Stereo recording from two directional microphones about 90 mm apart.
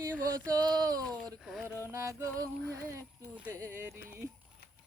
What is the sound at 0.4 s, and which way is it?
Speech, 45° right (ahead or behind).